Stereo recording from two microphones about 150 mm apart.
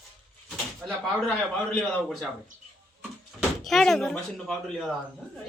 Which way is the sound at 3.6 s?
Centre (ahead or behind).